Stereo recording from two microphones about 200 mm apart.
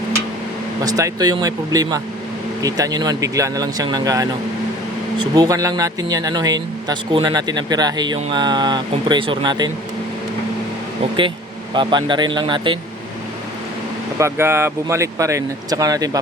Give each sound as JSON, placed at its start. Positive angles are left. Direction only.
{"t": 0.9, "sound": "speech", "side_deg": -15}
{"t": 11.7, "sound": "speech", "side_deg": -25}
{"t": 14.2, "sound": "speech", "side_deg": -10}